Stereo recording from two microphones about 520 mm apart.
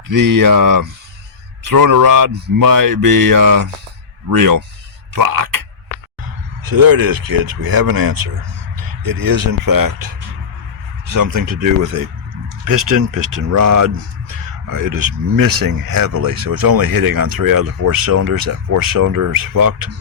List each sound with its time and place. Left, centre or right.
0.1 s speech: right
6.7 s speech: right